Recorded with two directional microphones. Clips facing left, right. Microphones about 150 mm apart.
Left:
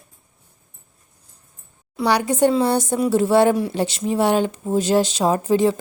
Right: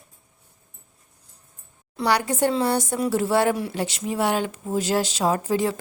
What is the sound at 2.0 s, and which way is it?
A woman's voice, 15° left (ahead or behind).